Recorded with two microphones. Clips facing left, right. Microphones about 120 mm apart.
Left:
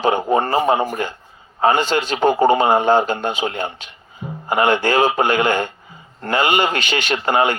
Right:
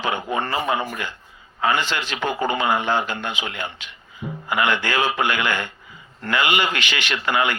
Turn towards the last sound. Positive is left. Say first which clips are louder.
# left 5 dB
turn(degrees=40)  # may be behind; listen again after turning